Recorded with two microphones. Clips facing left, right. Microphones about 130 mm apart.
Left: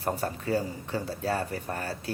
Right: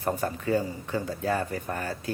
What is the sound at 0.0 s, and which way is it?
Speech, 35° left (ahead or behind).